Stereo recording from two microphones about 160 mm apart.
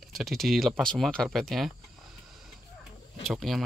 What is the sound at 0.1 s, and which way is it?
Speech, centre (ahead or behind).